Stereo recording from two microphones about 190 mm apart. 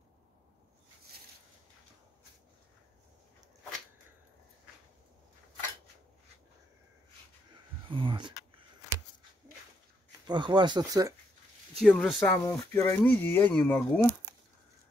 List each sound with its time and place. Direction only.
7.9 s a sound: 25° right (ahead or behind)
10.2 s speech: 25° right (ahead or behind)
11.8 s speech: 5° left (ahead or behind)